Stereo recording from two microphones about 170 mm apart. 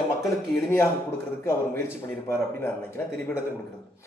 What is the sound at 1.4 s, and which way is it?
Speech, 15° left (ahead or behind).